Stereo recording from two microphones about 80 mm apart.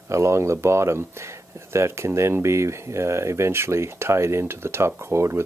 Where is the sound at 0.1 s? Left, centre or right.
Right.